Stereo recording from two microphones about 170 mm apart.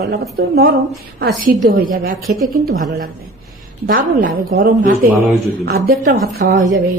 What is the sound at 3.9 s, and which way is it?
A woman's voice, 55° right (ahead or behind).